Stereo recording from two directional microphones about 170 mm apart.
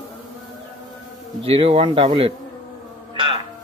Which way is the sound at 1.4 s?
35° right (ahead or behind).